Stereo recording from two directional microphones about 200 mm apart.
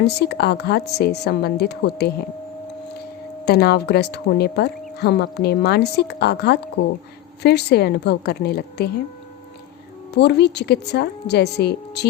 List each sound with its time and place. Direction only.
0.0 s speech: 55° left (ahead or behind)
3.4 s speech: 50° left (ahead or behind)
10.2 s speech: 55° left (ahead or behind)